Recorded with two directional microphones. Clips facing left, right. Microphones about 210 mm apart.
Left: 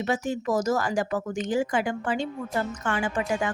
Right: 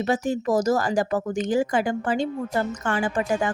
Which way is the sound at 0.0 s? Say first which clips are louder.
Right 3 dB; 35° right (ahead or behind).